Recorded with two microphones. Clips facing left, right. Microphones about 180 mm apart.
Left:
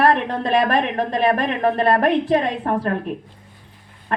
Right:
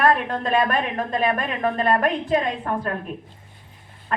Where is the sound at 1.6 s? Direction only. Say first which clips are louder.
Left 3 dB; 35° left (ahead or behind).